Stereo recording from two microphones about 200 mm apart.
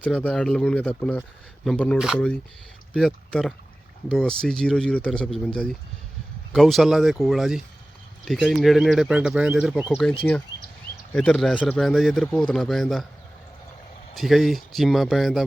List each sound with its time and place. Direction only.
0.0 s a man's voice: 5° left (ahead or behind)
14.2 s a man's voice: centre (ahead or behind)